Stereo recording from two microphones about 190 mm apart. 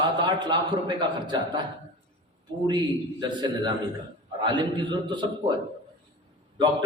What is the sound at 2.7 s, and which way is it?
A man's voice, 25° right (ahead or behind).